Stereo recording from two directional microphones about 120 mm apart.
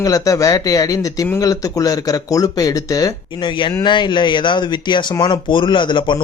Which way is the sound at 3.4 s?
40° left (ahead or behind).